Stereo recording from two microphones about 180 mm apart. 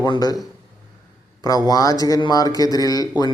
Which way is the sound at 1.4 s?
20° left (ahead or behind).